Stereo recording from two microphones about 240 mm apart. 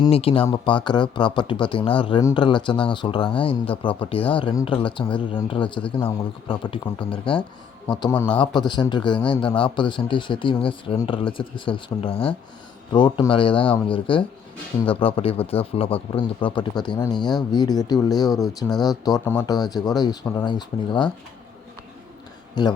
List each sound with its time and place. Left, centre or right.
0.0 s a man's voice: left